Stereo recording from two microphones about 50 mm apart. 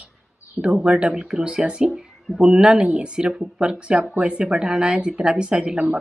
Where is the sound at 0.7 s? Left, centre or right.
Centre.